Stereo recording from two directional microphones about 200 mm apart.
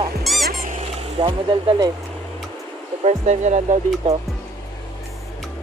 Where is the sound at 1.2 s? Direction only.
25° right (ahead or behind).